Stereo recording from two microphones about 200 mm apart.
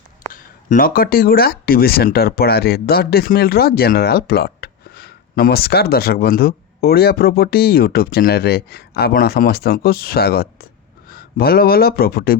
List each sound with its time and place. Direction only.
0.3 s speech: 45° left (ahead or behind)